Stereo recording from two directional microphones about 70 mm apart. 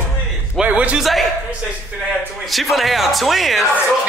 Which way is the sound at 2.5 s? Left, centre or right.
Centre.